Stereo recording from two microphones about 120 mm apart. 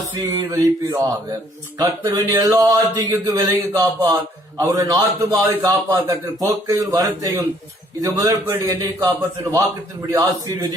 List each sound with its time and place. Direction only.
0.2 s speech: 30° right (ahead or behind)